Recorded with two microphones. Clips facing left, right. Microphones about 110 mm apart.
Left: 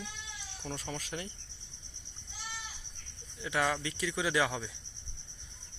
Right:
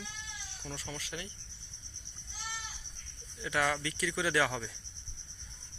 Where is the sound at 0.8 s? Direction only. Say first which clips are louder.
Left 1 dB; 45° left (ahead or behind).